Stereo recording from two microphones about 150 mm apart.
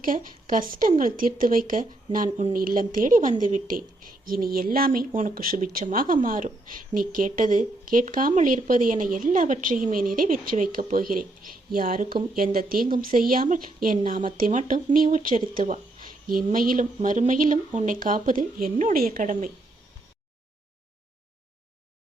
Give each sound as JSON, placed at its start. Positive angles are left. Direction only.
{"t": 0.0, "sound": "a woman's voice", "side_deg": -65}